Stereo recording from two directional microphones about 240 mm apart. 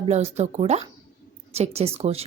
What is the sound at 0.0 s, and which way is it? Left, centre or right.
Speech, right.